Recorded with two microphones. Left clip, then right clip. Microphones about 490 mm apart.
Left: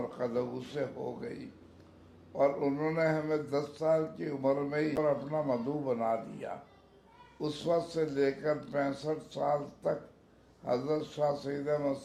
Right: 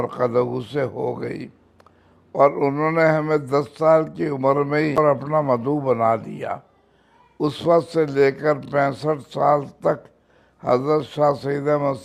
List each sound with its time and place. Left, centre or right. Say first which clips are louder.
0.0 s a man's voice: right 14 dB; right